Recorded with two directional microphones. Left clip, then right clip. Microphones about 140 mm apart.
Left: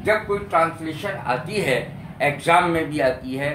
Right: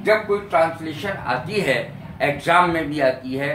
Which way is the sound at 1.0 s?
30° left (ahead or behind).